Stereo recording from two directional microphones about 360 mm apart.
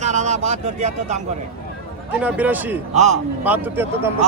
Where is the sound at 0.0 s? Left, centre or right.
Centre.